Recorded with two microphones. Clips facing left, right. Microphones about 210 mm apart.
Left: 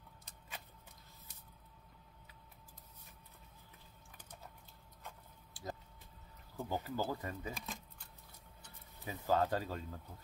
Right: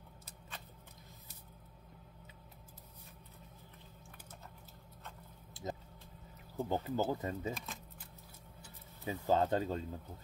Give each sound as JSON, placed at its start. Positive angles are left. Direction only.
{"t": 5.5, "sound": "a sound", "side_deg": -20}
{"t": 6.5, "sound": "speech", "side_deg": -20}
{"t": 7.5, "sound": "speech", "side_deg": 0}
{"t": 9.0, "sound": "speech", "side_deg": -25}